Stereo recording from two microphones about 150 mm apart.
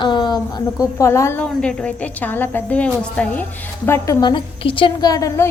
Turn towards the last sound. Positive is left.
turn(degrees=20)  # may be behind; listen again after turning